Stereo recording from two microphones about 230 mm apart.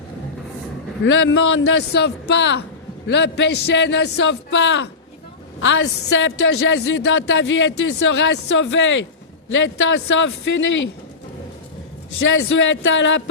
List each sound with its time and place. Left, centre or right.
1.0 s a woman's voice: left
12.3 s a man's voice: left